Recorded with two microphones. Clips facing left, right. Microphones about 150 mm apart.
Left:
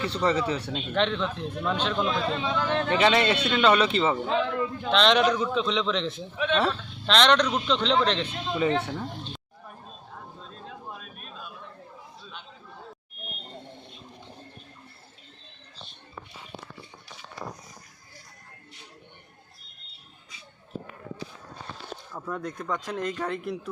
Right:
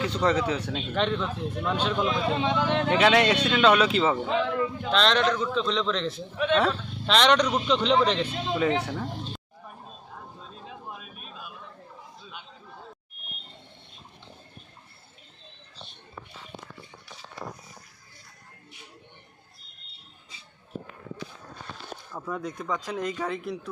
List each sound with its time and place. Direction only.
0.2 s a man's voice: centre (ahead or behind)
2.3 s speech: 20° right (ahead or behind)
2.9 s a man's voice: centre (ahead or behind)
5.2 s a man's voice: 10° left (ahead or behind); by 8.3 s 10° right (ahead or behind)
8.8 s a sound: centre (ahead or behind)
12.2 s chatter: 5° right (ahead or behind)
22.1 s a man's voice: centre (ahead or behind)